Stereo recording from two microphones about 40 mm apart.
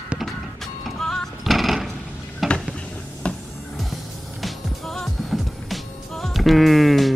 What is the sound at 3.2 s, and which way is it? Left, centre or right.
Music, left.